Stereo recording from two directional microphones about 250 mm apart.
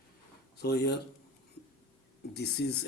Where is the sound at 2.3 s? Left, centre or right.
Left.